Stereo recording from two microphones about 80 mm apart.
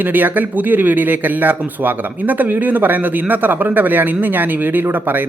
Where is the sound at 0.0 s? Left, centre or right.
Right.